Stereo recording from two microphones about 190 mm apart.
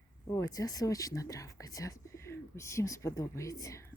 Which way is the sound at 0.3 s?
20° left (ahead or behind).